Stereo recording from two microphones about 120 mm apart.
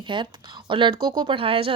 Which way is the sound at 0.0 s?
40° right (ahead or behind).